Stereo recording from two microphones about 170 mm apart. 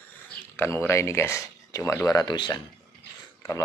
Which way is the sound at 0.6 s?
15° left (ahead or behind).